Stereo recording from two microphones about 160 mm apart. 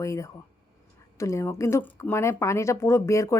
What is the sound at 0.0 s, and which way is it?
Speech, 20° left (ahead or behind).